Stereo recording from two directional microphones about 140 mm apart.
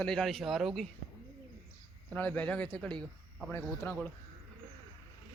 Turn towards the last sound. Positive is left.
turn(degrees=20)  # may be behind; listen again after turning